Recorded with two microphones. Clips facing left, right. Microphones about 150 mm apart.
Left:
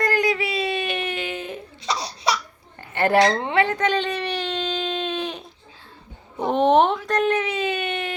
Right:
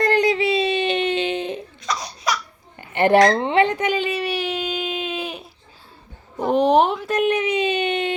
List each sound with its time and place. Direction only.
0.0 s a sound: 25° right (ahead or behind)
1.9 s laughter: 30° left (ahead or behind)
2.9 s speech: 20° right (ahead or behind)
3.8 s baby cry: 10° right (ahead or behind)
6.3 s speech: centre (ahead or behind)
7.2 s speech: 15° right (ahead or behind)